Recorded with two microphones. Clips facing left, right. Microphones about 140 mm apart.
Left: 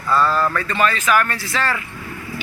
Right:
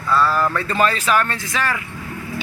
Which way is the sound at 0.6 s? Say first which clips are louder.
Even; 35° right (ahead or behind).